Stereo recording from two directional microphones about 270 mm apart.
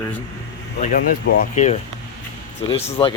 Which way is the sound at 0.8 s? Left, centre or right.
Left.